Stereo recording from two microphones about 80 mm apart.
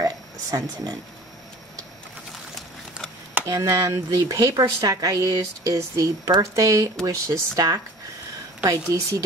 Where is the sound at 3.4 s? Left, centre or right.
Right.